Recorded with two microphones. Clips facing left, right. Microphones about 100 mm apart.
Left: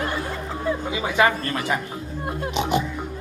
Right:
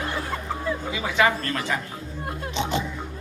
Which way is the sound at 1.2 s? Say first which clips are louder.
Left 1 dB; 15° left (ahead or behind).